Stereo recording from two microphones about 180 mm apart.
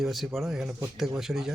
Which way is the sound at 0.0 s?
Centre (ahead or behind).